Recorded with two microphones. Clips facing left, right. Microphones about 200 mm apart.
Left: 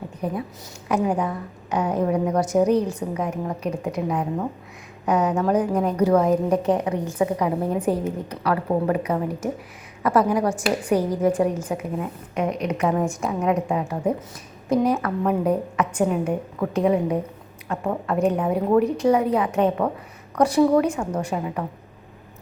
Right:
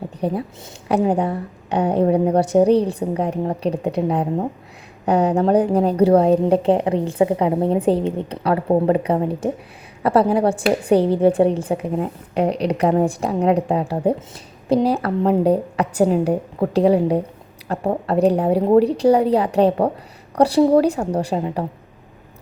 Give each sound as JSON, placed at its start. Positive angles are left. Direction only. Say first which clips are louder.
{"t": 0.2, "sound": "a woman's voice", "louder": "right 5 dB", "side_deg": -30}